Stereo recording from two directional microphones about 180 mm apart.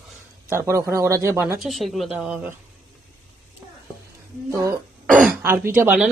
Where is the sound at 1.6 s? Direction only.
Centre (ahead or behind).